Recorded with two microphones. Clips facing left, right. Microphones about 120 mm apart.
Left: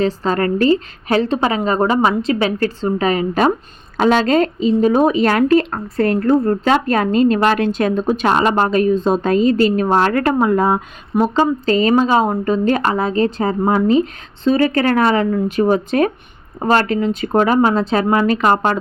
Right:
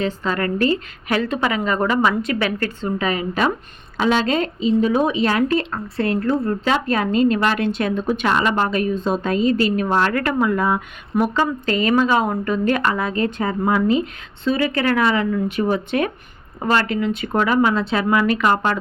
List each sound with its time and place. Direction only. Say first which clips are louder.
0.0 s speech: left 5 dB; 35° left (ahead or behind)